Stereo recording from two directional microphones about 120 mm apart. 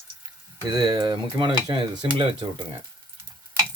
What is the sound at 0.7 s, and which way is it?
Speech, 35° right (ahead or behind).